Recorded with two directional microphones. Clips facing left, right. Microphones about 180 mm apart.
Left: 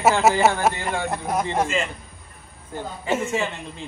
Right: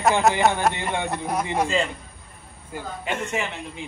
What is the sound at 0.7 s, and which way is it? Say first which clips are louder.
Speech: even; 20° right (ahead or behind).